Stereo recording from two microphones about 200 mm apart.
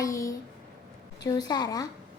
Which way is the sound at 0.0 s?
15° left (ahead or behind).